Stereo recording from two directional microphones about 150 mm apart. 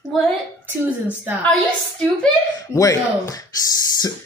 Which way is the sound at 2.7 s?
25° left (ahead or behind).